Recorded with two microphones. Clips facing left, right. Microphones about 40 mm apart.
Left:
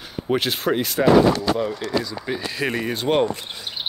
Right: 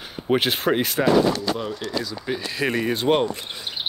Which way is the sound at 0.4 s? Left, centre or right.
Right.